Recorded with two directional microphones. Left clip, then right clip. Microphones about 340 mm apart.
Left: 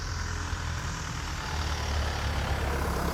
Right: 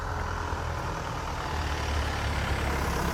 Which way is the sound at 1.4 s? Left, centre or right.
Right.